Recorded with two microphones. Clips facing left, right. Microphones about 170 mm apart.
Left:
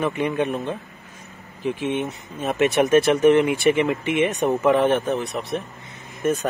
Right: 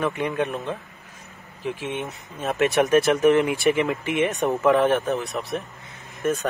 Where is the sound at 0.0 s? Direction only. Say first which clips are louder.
Left 2 dB; centre (ahead or behind).